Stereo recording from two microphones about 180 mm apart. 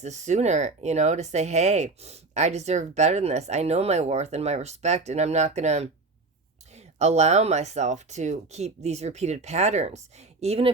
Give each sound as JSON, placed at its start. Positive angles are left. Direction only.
{"t": 0.0, "sound": "speech", "side_deg": -40}